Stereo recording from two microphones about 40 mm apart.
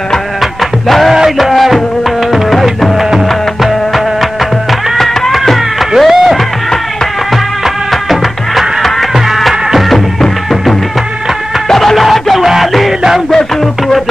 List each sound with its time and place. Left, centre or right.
0.4 s music: centre
1.1 s music: centre
1.5 s music: centre
4.9 s cat: centre
7.6 s music: centre
11.7 s music: centre